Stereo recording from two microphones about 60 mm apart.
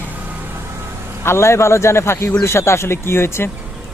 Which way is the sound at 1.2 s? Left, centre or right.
Left.